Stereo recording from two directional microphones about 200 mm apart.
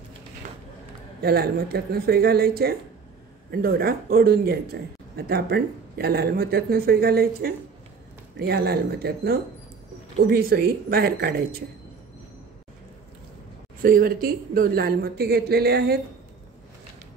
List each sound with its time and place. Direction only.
0.4 s a sound: 40° right (ahead or behind)
1.2 s a man's voice: 50° right (ahead or behind)
13.8 s a man's voice: 45° right (ahead or behind)